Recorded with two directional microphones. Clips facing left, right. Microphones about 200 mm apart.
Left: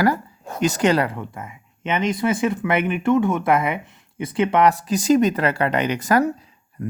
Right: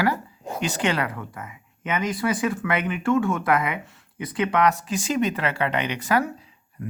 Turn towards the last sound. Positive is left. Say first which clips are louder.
# left 5 dB
turn(degrees=40)  # may be behind; listen again after turning